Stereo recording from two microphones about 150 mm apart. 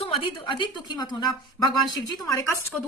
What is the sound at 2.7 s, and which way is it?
Speech, 5° left (ahead or behind).